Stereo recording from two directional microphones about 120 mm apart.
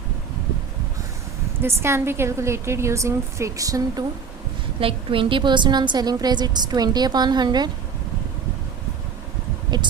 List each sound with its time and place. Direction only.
1.6 s a woman's voice: 20° right (ahead or behind)
4.8 s a woman's voice: 45° right (ahead or behind)